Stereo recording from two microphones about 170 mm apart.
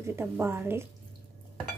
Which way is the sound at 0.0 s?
15° right (ahead or behind).